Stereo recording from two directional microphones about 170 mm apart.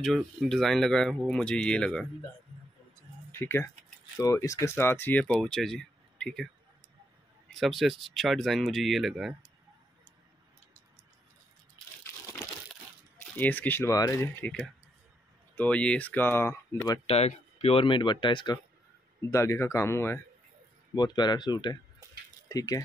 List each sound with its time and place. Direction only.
0.0 s speech: centre (ahead or behind)
3.3 s speech: 15° left (ahead or behind)
7.5 s speech: centre (ahead or behind)
13.2 s speech: 10° left (ahead or behind)
17.0 s speech: 40° left (ahead or behind)
19.3 s speech: 15° left (ahead or behind)
20.9 s speech: 25° left (ahead or behind)